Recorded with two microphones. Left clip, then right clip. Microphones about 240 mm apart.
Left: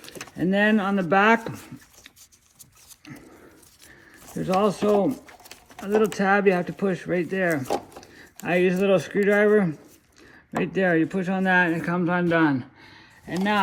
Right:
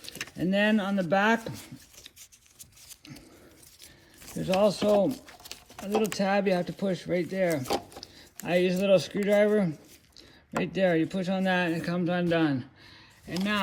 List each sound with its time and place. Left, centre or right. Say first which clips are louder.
0.1 s speech: left 4 dB; centre
1.5 s a sound: left 4 dB; left
4.4 s speech: left 2 dB; left
6.0 s speech: left 6 dB; centre
7.7 s a sound: left 3 dB; centre
8.2 s speech: left 4 dB; left